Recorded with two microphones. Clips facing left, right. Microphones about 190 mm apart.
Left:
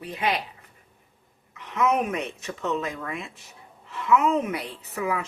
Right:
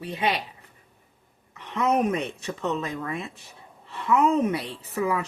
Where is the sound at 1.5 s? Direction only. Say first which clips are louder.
Even; 35° right (ahead or behind).